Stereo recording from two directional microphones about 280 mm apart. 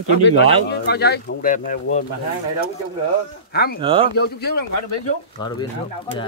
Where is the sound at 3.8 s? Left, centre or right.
Centre.